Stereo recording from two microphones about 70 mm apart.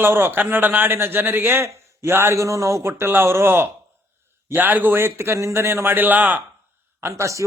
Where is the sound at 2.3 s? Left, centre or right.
Right.